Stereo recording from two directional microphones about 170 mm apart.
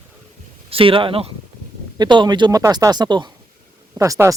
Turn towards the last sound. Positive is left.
turn(degrees=-20)  # may be behind; listen again after turning